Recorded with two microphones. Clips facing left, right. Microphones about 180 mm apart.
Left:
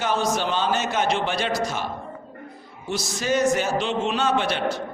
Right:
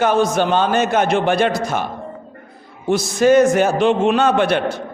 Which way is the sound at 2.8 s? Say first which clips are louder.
Right 12 dB; 55° right (ahead or behind).